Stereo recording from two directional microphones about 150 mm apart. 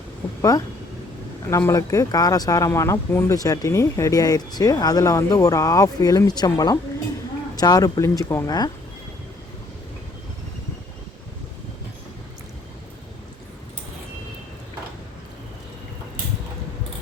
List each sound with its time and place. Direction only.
1.5 s speech: 20° left (ahead or behind)